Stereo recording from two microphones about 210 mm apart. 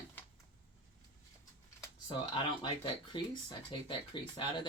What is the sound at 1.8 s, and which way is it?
Speech, 20° left (ahead or behind).